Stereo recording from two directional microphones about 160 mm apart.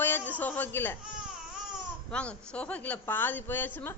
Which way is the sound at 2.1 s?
5° left (ahead or behind).